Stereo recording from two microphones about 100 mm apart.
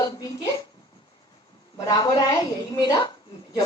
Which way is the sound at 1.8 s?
40° left (ahead or behind).